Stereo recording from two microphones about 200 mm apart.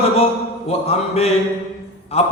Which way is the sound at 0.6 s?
30° left (ahead or behind).